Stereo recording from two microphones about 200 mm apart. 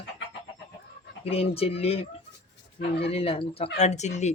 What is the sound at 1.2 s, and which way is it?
Speech, 30° left (ahead or behind).